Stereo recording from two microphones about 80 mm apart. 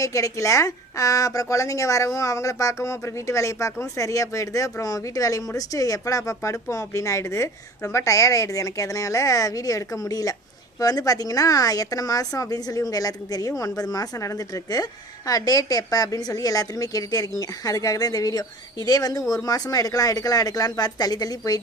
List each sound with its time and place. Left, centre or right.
0.0 s a woman's voice: left